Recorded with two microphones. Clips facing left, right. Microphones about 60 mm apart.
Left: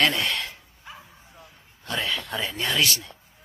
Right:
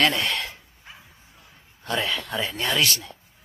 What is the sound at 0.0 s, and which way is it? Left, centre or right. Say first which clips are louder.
Speech: right 1 dB; centre.